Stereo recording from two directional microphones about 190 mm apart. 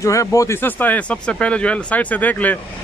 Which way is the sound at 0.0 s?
15° left (ahead or behind).